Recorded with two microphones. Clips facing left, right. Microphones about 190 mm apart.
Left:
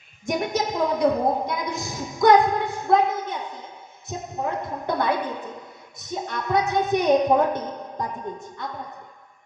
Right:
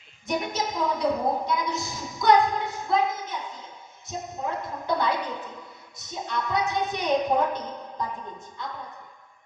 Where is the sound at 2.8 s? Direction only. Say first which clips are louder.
Left 5 dB; 60° left (ahead or behind).